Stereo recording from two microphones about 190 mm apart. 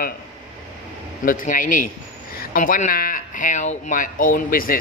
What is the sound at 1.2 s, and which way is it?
Speech, 45° left (ahead or behind).